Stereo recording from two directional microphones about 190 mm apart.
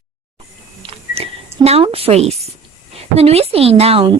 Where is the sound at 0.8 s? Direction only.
30° right (ahead or behind).